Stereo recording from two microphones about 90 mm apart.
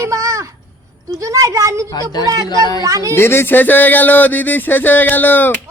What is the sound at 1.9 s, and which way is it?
Speech, 50° left (ahead or behind).